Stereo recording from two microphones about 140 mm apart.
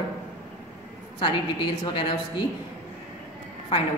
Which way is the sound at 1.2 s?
35° left (ahead or behind).